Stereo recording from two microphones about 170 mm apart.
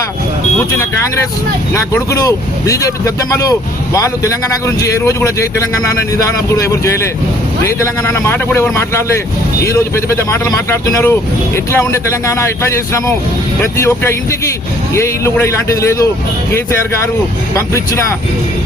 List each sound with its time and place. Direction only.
1.7 s speech: 15° left (ahead or behind)
13.6 s speech: 15° left (ahead or behind)